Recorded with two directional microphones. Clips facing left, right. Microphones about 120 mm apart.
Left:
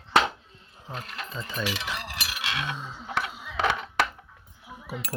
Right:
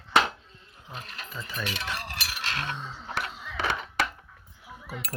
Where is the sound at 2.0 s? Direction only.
90° left.